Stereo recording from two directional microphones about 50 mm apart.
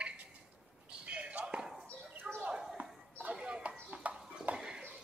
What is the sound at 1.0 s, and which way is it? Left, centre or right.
Basketball bounce, right.